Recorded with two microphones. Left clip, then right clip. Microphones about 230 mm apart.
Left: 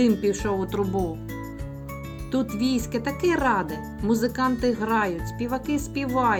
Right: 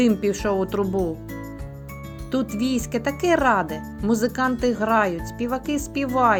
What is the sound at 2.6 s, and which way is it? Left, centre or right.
Speech, right.